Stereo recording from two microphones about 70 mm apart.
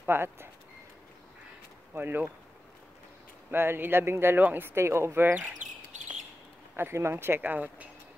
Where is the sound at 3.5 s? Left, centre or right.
Right.